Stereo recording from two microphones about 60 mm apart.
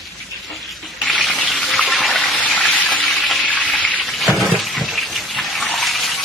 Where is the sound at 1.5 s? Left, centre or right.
Centre.